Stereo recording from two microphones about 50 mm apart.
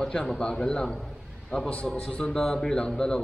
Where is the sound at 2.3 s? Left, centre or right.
Centre.